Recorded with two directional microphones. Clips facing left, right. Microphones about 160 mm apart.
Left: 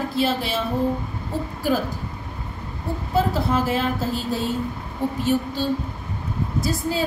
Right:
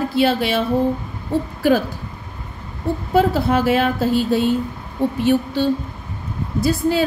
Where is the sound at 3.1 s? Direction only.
75° right (ahead or behind).